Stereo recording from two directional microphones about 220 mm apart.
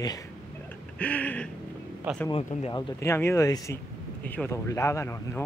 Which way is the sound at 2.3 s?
25° left (ahead or behind).